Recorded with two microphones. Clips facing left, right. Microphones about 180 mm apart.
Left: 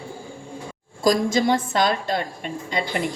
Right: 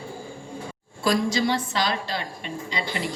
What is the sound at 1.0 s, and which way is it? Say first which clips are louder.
A woman's voice: left 3 dB; 45° left (ahead or behind).